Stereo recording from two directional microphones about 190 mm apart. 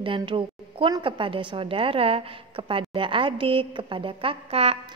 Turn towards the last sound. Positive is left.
turn(degrees=-30)  # may be behind; listen again after turning